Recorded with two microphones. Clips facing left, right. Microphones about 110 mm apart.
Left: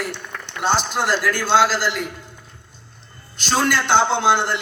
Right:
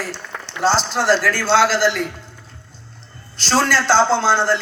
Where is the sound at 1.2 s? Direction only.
15° left (ahead or behind).